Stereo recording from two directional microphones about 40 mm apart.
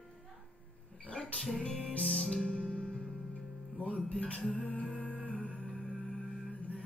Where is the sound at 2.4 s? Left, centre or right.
Left.